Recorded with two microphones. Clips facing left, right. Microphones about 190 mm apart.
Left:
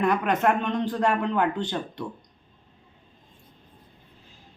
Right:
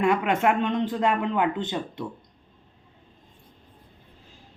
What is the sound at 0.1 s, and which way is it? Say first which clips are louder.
Speech: right 1 dB; 25° right (ahead or behind).